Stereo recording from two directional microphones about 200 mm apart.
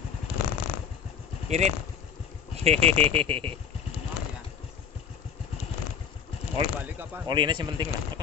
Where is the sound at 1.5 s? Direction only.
35° right (ahead or behind).